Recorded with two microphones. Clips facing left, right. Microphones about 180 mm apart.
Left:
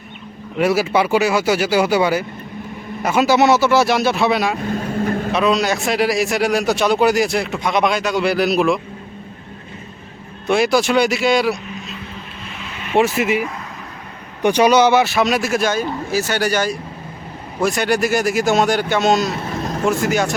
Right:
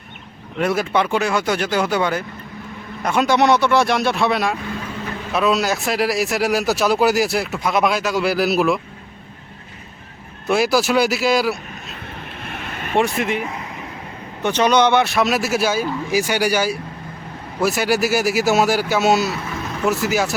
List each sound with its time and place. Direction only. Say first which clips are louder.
0.6 s a man's voice: left 3 dB; 5° left (ahead or behind)
4.6 s vehicle: left 7 dB; 45° left (ahead or behind)
5.3 s a man's voice: right 1 dB; centre (ahead or behind)
10.4 s a man's voice: left 2 dB; centre (ahead or behind)
12.5 s vehicle: right 4 dB; 55° right (ahead or behind)
13.0 s a man's voice: left 3 dB; 5° left (ahead or behind)
14.4 s a man's voice: left 3 dB; 10° left (ahead or behind); by 19.3 s 5° right (ahead or behind)
19.4 s vehicle: left 4 dB; 35° left (ahead or behind)
20.1 s a man's voice: left 2 dB; 5° right (ahead or behind)